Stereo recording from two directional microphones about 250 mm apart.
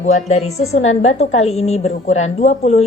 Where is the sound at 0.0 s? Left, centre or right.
Left.